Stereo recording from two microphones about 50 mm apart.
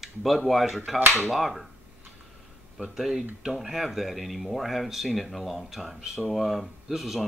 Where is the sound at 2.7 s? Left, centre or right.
Centre.